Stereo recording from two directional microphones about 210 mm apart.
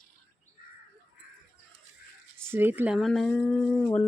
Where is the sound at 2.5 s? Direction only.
10° right (ahead or behind); by 3.9 s 5° left (ahead or behind).